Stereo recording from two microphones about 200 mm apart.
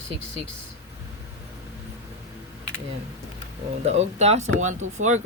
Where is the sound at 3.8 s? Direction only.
35° right (ahead or behind).